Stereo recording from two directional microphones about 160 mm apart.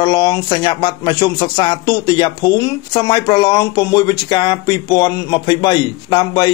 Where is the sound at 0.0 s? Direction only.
25° left (ahead or behind).